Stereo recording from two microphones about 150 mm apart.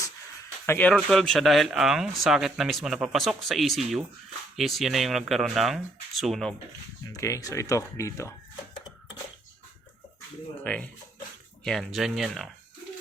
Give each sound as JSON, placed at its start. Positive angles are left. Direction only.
{"t": 0.6, "sound": "speech", "side_deg": 10}
{"t": 7.1, "sound": "speech", "side_deg": 20}
{"t": 10.6, "sound": "speech", "side_deg": 10}